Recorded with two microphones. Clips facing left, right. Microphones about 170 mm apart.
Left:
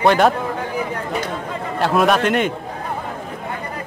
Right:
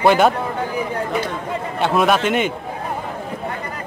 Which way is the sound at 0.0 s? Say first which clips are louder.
Even; 5° right (ahead or behind).